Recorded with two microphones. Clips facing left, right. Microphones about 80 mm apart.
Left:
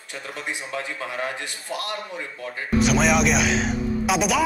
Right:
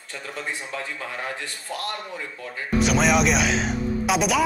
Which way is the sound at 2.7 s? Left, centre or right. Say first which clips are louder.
Left 1 dB; centre.